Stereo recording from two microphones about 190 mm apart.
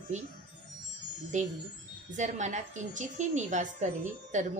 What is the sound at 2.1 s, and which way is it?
A woman's voice, 40° right (ahead or behind).